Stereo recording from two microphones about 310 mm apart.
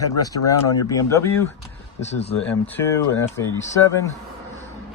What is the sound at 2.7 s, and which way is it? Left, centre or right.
Speech, centre.